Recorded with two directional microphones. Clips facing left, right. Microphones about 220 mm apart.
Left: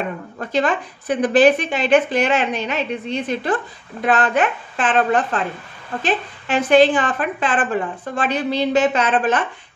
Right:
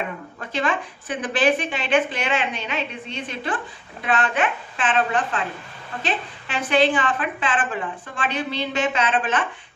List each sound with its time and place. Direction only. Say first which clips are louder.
0.4 s a woman's voice: left 5 dB; 40° left (ahead or behind)
6.4 s a woman's voice: left 7 dB; 40° left (ahead or behind)